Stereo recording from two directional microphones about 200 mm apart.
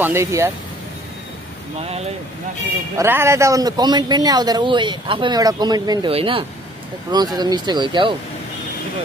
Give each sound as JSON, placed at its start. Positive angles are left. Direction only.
{"t": 0.0, "sound": "speech", "side_deg": -15}
{"t": 1.8, "sound": "speech", "side_deg": -30}
{"t": 3.0, "sound": "speech", "side_deg": -15}